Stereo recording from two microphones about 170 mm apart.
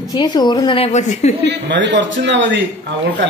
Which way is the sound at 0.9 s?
45° left (ahead or behind).